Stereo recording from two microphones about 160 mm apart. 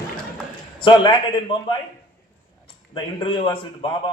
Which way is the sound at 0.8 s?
30° left (ahead or behind).